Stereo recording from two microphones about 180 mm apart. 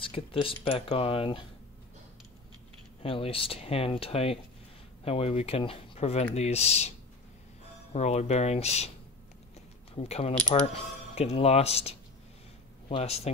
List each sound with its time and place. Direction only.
0.0 s speech: 30° left (ahead or behind)
3.0 s speech: 30° left (ahead or behind)
7.9 s speech: 40° left (ahead or behind)
9.9 s speech: 35° left (ahead or behind)